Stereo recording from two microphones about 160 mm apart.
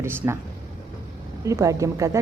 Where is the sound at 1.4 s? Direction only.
20° right (ahead or behind).